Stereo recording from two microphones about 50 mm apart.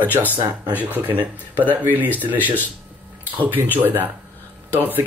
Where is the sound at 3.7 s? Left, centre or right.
Right.